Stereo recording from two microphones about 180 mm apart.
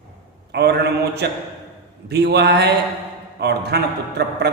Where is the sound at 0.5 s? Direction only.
65° right (ahead or behind).